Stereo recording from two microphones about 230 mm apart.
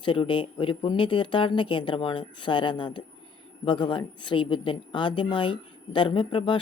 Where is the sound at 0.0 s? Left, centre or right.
Left.